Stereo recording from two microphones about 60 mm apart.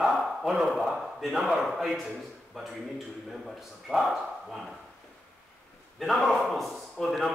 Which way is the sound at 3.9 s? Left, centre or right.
Centre.